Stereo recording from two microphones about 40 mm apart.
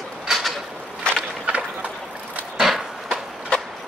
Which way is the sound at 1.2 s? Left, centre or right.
Right.